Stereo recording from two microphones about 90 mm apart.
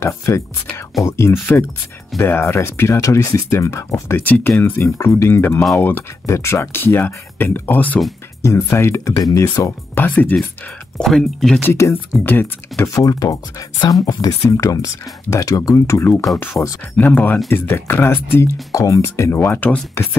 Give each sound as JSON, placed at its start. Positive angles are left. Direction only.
{"t": 1.0, "sound": "speech", "side_deg": 30}
{"t": 4.2, "sound": "speech", "side_deg": 20}
{"t": 8.4, "sound": "speech", "side_deg": 35}
{"t": 9.9, "sound": "speech", "side_deg": 20}
{"t": 11.0, "sound": "speech", "side_deg": 0}
{"t": 11.6, "sound": "speech", "side_deg": 30}
{"t": 12.8, "sound": "speech", "side_deg": 40}
{"t": 16.6, "sound": "speech", "side_deg": 20}